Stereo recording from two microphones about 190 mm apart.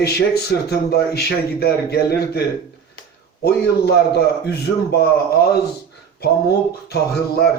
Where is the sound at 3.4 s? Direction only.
60° left (ahead or behind).